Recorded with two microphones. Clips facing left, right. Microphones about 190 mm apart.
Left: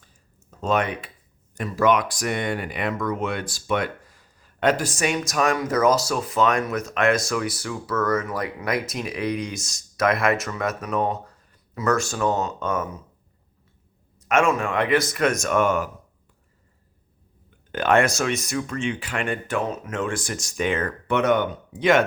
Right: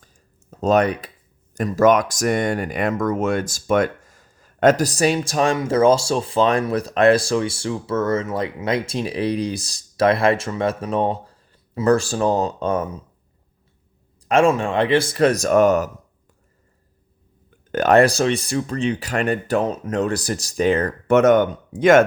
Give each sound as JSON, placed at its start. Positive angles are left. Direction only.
{"t": 0.6, "sound": "speech", "side_deg": -40}
{"t": 14.2, "sound": "speech", "side_deg": -30}
{"t": 17.7, "sound": "speech", "side_deg": -40}